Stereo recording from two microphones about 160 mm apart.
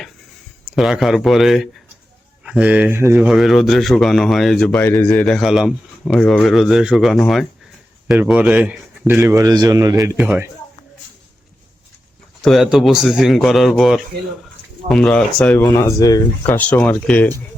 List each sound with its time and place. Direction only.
0.6 s speech: centre (ahead or behind)
3.2 s speech: centre (ahead or behind); by 10.1 s 20° right (ahead or behind)
10.2 s speech: 10° right (ahead or behind)
12.4 s speech: centre (ahead or behind)
15.6 s speech: 25° left (ahead or behind)
16.5 s speech: 10° left (ahead or behind)